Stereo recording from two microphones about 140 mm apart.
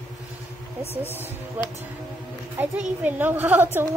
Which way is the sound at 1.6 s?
10° right (ahead or behind).